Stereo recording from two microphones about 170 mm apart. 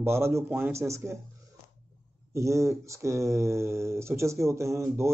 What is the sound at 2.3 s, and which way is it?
Speech, 15° right (ahead or behind).